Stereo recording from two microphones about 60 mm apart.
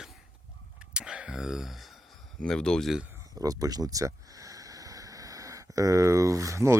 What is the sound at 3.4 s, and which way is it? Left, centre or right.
Speech, right.